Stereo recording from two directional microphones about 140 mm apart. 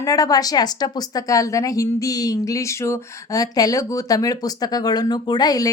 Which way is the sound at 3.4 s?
25° left (ahead or behind).